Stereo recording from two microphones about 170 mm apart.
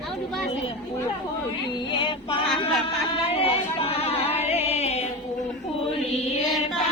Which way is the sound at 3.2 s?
35° left (ahead or behind).